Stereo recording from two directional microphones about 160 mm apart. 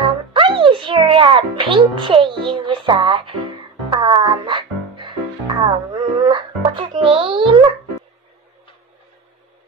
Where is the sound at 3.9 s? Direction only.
30° right (ahead or behind).